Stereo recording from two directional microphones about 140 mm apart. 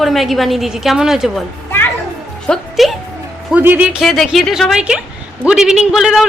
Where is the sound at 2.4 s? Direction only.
Centre (ahead or behind).